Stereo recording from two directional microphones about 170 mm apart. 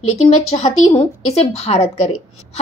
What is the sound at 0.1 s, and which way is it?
A woman's voice, 35° left (ahead or behind).